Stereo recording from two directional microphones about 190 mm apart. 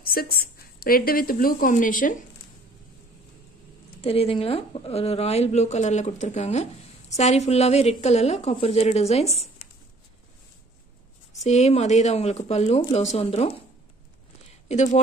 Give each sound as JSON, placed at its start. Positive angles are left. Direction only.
{"t": 0.0, "sound": "a woman's voice", "side_deg": 50}
{"t": 4.0, "sound": "speech", "side_deg": 30}
{"t": 11.4, "sound": "speech", "side_deg": 35}
{"t": 14.7, "sound": "speech", "side_deg": 40}